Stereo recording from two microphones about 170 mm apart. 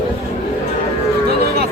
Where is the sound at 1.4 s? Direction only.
70° right (ahead or behind).